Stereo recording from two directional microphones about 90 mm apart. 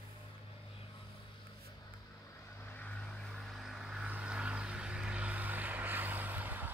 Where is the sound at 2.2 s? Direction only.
30° left (ahead or behind).